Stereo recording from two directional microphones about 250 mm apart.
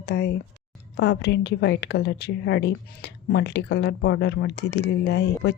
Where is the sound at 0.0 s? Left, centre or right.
Left.